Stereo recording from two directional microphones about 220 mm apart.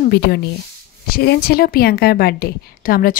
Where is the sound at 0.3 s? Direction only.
50° left (ahead or behind).